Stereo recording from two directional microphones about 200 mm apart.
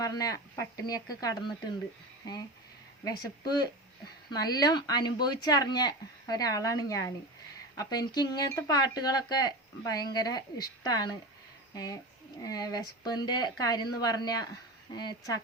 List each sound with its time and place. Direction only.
0.0 s speech: 20° left (ahead or behind)
3.0 s speech: 20° left (ahead or behind)